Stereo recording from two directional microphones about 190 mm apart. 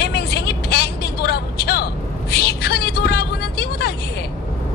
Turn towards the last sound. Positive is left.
turn(degrees=60)  # may be behind; listen again after turning